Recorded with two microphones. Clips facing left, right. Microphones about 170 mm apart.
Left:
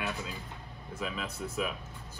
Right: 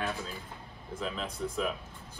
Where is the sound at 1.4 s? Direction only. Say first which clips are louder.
Right 7 dB; 5° left (ahead or behind).